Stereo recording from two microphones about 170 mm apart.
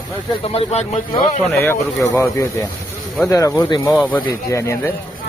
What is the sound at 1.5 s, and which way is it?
Speech, 15° left (ahead or behind).